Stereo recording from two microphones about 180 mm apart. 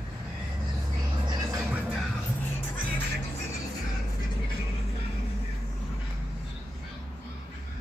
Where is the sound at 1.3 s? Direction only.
20° right (ahead or behind).